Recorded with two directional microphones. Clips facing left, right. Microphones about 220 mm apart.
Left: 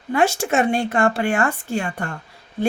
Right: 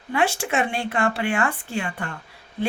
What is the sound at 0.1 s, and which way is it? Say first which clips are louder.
Speech: left 4 dB; 45° left (ahead or behind).